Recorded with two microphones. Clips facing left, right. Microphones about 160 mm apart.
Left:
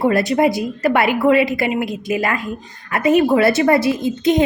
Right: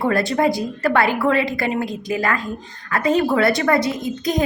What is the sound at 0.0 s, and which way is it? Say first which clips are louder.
A woman's voice: left 3 dB; 20° left (ahead or behind).